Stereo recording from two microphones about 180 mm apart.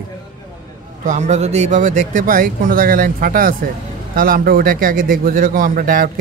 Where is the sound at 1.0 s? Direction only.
40° right (ahead or behind).